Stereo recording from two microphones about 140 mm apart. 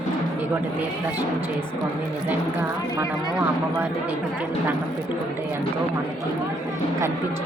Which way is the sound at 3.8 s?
15° right (ahead or behind).